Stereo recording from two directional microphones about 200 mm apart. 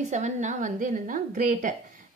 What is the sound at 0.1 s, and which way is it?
A woman's voice, 35° right (ahead or behind).